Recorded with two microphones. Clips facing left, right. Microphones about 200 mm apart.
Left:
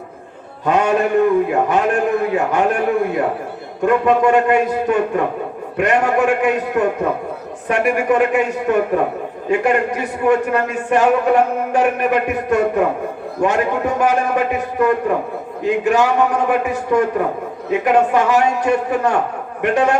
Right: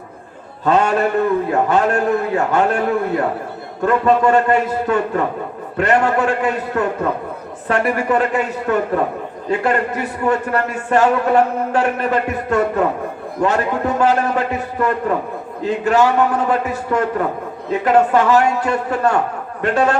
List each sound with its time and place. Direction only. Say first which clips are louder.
0.6 s a man's voice: even; 15° left (ahead or behind)
3.8 s a man's voice: left 1 dB; 15° left (ahead or behind)